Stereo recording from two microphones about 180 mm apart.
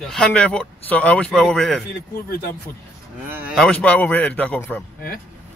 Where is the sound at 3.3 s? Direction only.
5° right (ahead or behind).